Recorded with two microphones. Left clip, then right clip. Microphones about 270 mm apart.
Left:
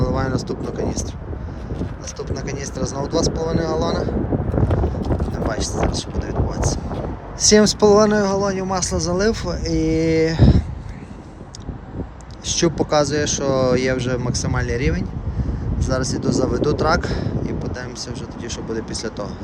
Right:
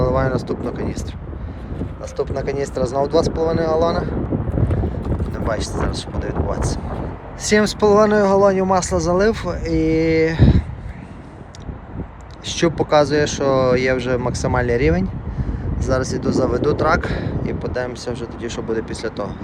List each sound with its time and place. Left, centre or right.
0.0 s speech: centre
2.1 s speech: centre
5.3 s speech: centre
12.5 s speech: centre